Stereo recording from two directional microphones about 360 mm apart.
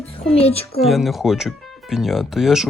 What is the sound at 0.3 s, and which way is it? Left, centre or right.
Speech, centre.